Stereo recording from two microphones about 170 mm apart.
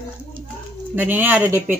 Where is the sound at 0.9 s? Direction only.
10° right (ahead or behind).